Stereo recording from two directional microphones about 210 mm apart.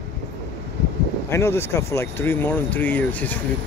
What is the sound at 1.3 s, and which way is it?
Speech, 10° left (ahead or behind).